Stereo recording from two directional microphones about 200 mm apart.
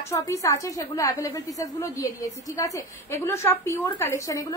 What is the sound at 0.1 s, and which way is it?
A woman's voice, 15° left (ahead or behind).